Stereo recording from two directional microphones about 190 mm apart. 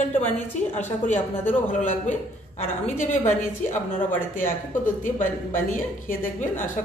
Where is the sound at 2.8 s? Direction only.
40° left (ahead or behind).